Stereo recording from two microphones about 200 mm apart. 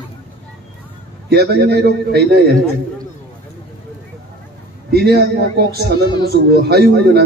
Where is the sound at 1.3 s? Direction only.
50° right (ahead or behind).